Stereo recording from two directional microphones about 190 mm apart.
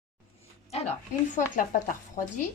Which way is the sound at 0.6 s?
35° left (ahead or behind).